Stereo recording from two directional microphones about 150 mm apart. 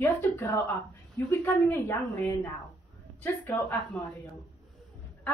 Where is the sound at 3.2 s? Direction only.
15° left (ahead or behind).